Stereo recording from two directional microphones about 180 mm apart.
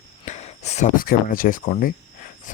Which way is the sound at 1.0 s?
50° left (ahead or behind).